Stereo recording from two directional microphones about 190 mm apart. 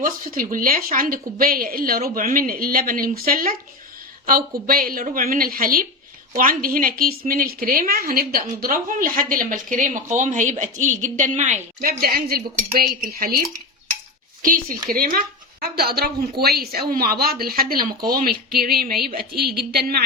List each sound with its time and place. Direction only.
0.0 s a woman's voice: 45° right (ahead or behind)
11.9 s a woman's voice: 50° right (ahead or behind)
14.4 s a woman's voice: 45° right (ahead or behind)